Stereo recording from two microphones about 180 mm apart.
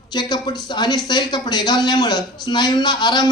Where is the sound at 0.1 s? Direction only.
25° left (ahead or behind).